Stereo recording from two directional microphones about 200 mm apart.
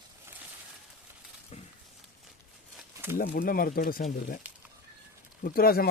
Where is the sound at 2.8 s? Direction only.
10° right (ahead or behind).